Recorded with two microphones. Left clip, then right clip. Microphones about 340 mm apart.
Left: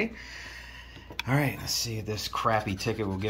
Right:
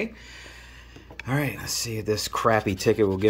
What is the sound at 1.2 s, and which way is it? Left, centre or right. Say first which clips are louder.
Speech: right 1 dB; centre.